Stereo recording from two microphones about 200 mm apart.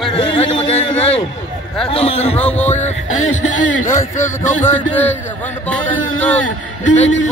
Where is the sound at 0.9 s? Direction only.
5° left (ahead or behind).